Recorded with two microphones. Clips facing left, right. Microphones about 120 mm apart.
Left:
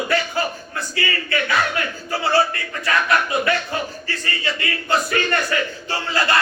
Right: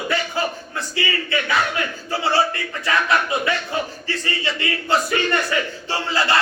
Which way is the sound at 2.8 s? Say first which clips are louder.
Even; 25° right (ahead or behind).